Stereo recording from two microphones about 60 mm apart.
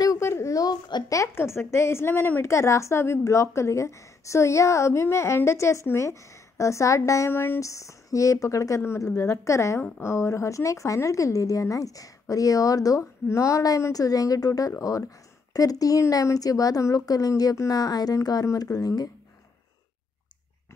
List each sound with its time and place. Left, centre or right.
0.2 s a sound: left
0.6 s a child's voice: left
1.3 s a woman's voice: left
2.4 s a woman's voice: left
7.2 s speech: left
7.6 s a woman's voice: left
8.8 s a woman's voice: left